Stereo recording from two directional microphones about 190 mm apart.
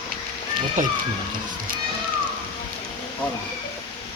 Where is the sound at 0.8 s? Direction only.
40° right (ahead or behind).